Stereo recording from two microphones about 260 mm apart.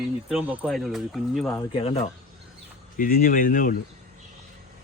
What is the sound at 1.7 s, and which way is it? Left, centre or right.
Speech, left.